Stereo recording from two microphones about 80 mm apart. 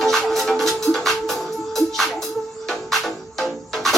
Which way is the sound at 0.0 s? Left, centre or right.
Centre.